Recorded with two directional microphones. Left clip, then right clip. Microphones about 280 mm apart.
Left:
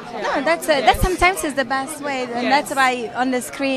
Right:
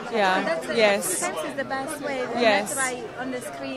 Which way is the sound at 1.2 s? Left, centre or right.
Left.